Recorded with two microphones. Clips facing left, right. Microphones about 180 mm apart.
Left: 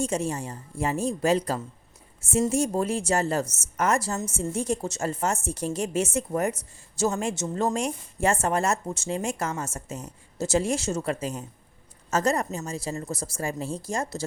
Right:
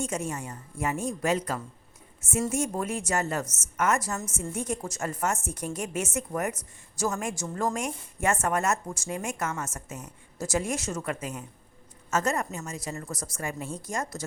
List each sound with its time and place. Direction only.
0.0 s a woman's voice: 30° left (ahead or behind)